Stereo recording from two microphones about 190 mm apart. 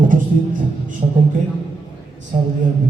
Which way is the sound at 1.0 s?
25° right (ahead or behind).